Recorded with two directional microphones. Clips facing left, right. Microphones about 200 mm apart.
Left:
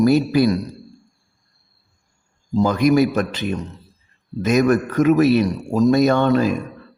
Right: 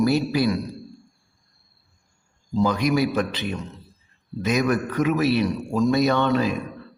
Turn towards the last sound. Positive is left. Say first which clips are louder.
# left 4 dB
turn(degrees=45)  # may be behind; listen again after turning